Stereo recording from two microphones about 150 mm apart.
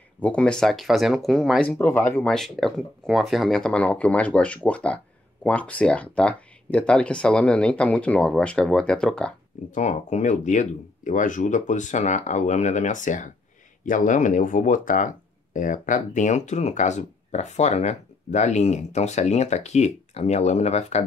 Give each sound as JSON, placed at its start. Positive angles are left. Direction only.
{"t": 0.2, "sound": "speech", "side_deg": 10}
{"t": 2.2, "sound": "speech", "side_deg": 0}
{"t": 9.7, "sound": "speech", "side_deg": 55}